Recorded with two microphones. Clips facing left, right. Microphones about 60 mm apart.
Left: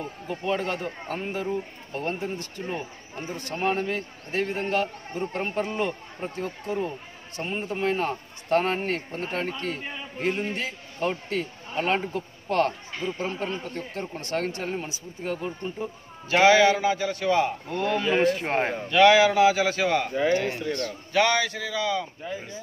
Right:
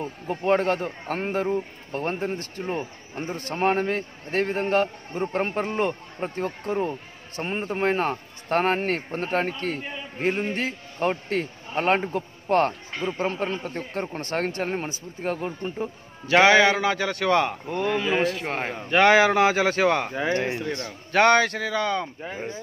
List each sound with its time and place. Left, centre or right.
0.0 s a man's voice: right
10.1 s a man's voice: right
10.5 s a man's voice: right
16.8 s a man's voice: right
17.6 s a man's voice: centre
18.9 s a man's voice: right
20.4 s a man's voice: centre
21.1 s speech: right